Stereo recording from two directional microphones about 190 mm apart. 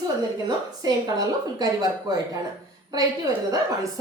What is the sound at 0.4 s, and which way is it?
A woman's voice, 20° right (ahead or behind).